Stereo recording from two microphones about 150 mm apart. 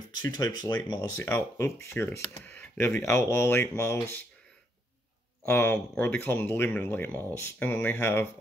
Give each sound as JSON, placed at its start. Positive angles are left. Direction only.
{"t": 0.1, "sound": "speech", "side_deg": 25}
{"t": 1.1, "sound": "speech", "side_deg": 15}
{"t": 5.5, "sound": "speech", "side_deg": 15}